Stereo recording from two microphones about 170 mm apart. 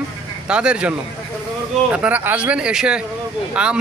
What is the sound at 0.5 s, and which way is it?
A man's voice, 5° right (ahead or behind).